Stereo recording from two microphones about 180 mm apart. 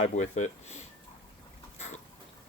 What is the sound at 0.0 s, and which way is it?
Speech, 40° left (ahead or behind).